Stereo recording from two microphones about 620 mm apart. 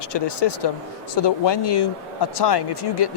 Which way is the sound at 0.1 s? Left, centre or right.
Left.